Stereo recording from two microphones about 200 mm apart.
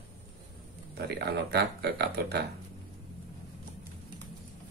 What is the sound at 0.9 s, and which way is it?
Speech, 55° right (ahead or behind).